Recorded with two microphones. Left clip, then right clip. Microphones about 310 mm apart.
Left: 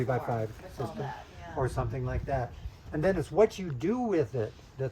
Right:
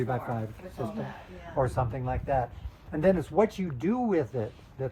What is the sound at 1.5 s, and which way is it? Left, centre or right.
Speech, right.